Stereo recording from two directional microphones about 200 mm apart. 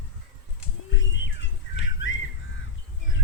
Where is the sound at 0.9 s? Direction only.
65° left (ahead or behind).